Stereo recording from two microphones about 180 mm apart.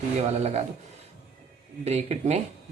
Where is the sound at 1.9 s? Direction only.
35° right (ahead or behind).